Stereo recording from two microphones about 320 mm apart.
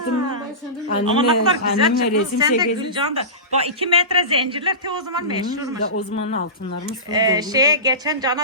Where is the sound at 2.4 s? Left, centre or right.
Centre.